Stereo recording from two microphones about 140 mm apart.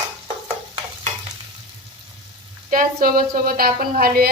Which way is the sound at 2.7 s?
90° right.